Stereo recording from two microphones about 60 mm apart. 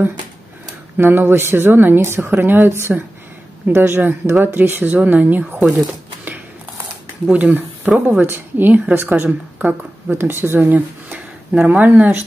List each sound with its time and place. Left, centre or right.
0.9 s speech: right
4.3 s speech: right
4.6 s speech: right
7.3 s speech: right